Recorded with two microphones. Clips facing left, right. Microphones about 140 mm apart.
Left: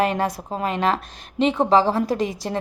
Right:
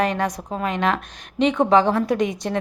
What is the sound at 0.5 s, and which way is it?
Speech, 35° left (ahead or behind).